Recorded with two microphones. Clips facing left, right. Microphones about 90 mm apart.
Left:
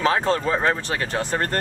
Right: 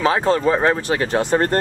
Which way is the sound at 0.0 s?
10° right (ahead or behind).